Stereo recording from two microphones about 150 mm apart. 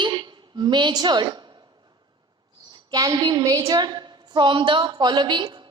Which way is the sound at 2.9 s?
25° right (ahead or behind).